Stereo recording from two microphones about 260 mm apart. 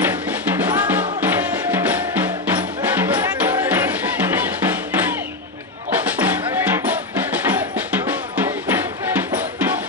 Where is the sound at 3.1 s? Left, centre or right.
Centre.